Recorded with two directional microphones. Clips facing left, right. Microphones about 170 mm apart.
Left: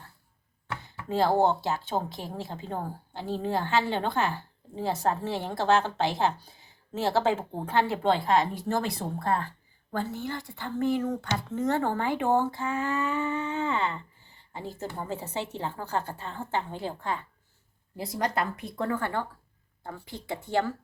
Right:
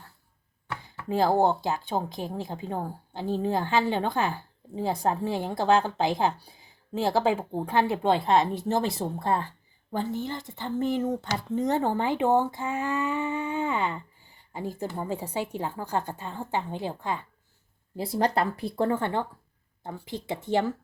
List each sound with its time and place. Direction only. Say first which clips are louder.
1.0 s a woman's voice: right 1 dB; 15° right (ahead or behind)
17.9 s a woman's voice: right 4 dB; 30° right (ahead or behind)